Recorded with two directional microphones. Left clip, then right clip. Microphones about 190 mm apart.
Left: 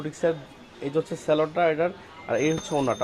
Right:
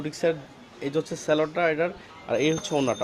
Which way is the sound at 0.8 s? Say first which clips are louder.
Left 1 dB; 5° right (ahead or behind).